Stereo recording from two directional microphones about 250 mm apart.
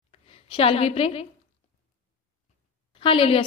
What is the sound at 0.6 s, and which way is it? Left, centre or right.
Speech, left.